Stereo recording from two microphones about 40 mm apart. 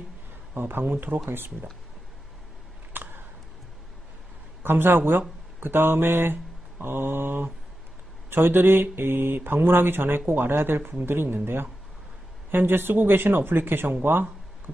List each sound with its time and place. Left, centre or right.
0.6 s speech: right
0.8 s speech: right
2.9 s a sound: right
4.6 s speech: right
5.6 s mantra: right
8.3 s speech: right